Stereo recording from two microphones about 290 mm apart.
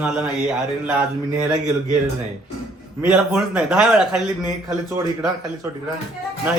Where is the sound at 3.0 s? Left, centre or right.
Centre.